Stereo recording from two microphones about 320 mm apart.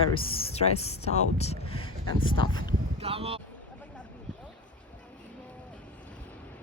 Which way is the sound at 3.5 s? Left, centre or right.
Centre.